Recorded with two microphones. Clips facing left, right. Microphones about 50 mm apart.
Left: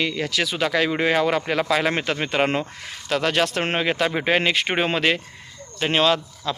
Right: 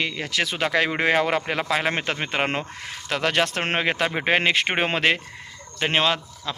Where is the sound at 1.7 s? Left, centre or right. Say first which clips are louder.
Left 1 dB; centre.